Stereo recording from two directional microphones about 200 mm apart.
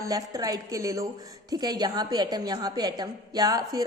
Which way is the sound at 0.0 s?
15° right (ahead or behind).